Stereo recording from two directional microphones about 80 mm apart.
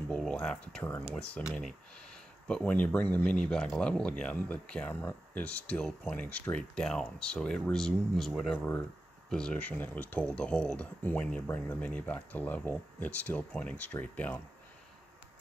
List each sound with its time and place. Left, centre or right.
0.3 s speech: centre
2.4 s speech: centre
3.3 s speech: centre
8.3 s speech: centre
8.5 s speech: left
9.3 s speech: centre